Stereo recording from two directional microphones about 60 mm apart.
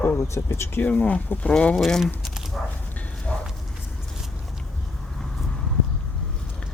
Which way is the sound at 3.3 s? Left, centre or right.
Left.